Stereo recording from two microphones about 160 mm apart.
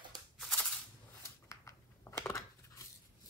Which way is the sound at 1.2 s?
20° left (ahead or behind).